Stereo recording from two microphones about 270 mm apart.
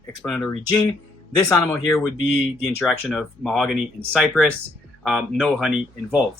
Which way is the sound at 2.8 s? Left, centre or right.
Centre.